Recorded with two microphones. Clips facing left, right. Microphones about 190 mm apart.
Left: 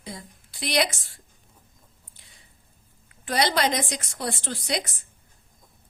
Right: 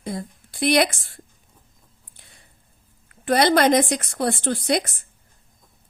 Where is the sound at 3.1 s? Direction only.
55° right (ahead or behind).